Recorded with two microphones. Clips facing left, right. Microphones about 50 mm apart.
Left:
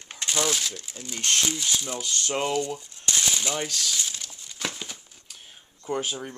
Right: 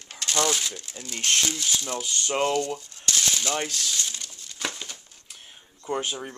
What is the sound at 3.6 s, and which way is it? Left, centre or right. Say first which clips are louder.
Crumpling: even; centre.